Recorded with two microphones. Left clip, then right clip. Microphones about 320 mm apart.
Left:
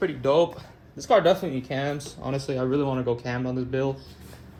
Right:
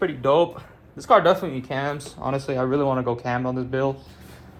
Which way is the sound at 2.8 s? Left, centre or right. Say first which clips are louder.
Right 3 dB; right.